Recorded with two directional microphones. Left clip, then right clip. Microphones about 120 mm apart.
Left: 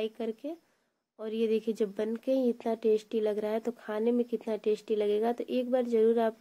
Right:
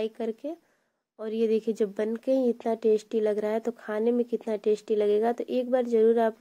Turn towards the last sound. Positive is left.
turn(degrees=-35)  # may be behind; listen again after turning